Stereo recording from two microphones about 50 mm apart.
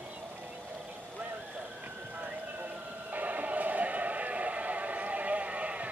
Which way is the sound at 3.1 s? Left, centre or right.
Right.